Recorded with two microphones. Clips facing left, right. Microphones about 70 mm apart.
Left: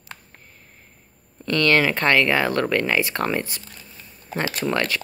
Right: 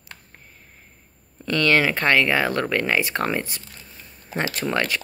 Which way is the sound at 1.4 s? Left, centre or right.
Centre.